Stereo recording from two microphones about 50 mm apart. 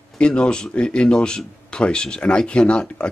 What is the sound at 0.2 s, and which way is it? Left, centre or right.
Speech, centre.